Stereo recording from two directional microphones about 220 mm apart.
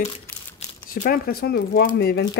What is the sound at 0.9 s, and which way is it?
Speech, 40° left (ahead or behind).